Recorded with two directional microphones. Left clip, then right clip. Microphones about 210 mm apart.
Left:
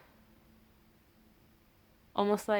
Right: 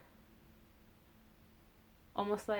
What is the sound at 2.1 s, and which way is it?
Speech, 40° left (ahead or behind).